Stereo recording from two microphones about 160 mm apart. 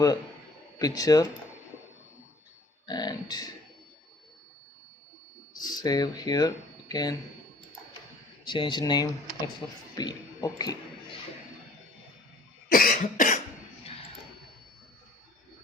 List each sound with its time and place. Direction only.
0.8 s speech: 25° left (ahead or behind)
2.8 s speech: 25° left (ahead or behind)
5.5 s speech: 25° left (ahead or behind)
8.4 s speech: 30° left (ahead or behind)
12.6 s cough: 65° left (ahead or behind)